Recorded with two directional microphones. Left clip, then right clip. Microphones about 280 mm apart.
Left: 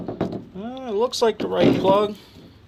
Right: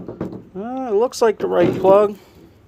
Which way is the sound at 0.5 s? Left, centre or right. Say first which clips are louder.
Right 8 dB; centre.